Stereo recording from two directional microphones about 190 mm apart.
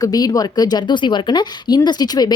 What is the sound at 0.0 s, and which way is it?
Speech, 20° left (ahead or behind).